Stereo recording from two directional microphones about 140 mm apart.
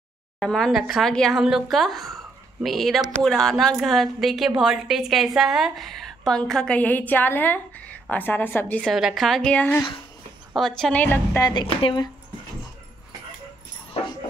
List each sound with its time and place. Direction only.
0.4 s a woman's voice: 5° left (ahead or behind)
8.9 s a woman's voice: centre (ahead or behind)
11.4 s a woman's voice: 35° left (ahead or behind)